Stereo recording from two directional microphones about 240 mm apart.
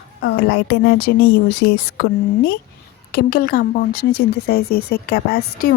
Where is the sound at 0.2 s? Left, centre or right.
Left.